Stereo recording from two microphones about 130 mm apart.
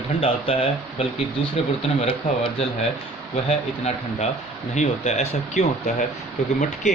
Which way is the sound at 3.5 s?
60° left (ahead or behind).